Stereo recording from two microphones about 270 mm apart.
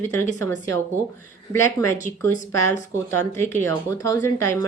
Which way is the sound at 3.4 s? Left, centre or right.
Centre.